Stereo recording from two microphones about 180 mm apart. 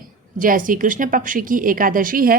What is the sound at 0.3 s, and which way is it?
A woman's voice, 50° right (ahead or behind).